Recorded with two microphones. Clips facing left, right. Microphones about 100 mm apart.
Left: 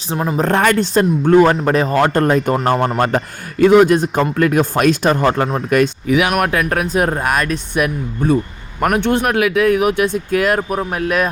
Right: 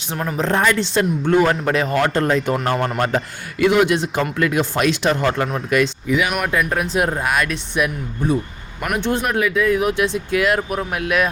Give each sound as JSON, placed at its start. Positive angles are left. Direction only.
{"t": 0.3, "sound": "a man's voice", "side_deg": 55}
{"t": 2.1, "sound": "a man's voice", "side_deg": 50}
{"t": 6.1, "sound": "a man's voice", "side_deg": 65}
{"t": 8.8, "sound": "speech", "side_deg": 55}